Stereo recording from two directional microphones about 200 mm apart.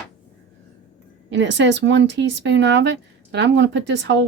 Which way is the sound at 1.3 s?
65° right (ahead or behind).